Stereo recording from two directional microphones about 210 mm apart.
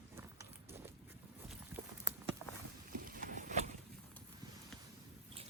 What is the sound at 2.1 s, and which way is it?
Walk, 15° right (ahead or behind).